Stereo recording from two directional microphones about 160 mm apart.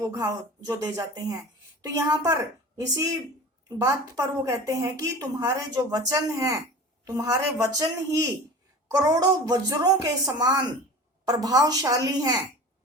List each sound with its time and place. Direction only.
0.0 s a woman's voice: 20° right (ahead or behind)